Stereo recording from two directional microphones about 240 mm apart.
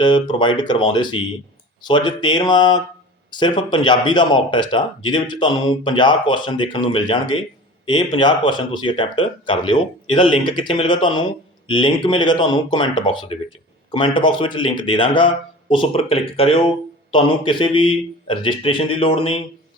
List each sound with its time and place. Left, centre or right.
0.0 s speech: centre